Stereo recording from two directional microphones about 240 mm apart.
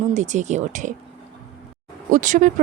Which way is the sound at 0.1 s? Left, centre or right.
Right.